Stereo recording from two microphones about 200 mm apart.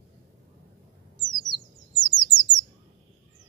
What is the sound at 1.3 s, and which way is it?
Bird, 20° left (ahead or behind).